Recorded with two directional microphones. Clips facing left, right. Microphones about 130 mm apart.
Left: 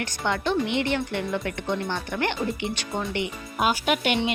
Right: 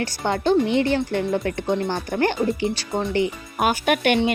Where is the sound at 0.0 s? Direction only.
35° right (ahead or behind).